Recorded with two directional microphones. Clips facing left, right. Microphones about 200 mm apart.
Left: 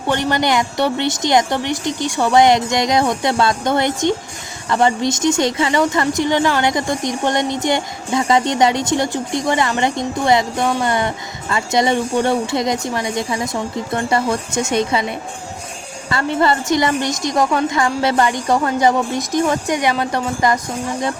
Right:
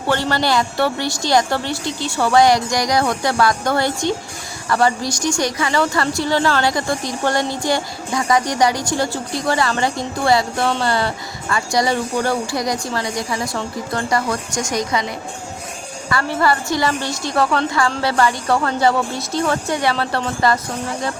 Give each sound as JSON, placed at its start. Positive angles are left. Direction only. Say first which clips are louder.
{"t": 0.1, "sound": "a woman's voice", "louder": "left 1 dB", "side_deg": 20}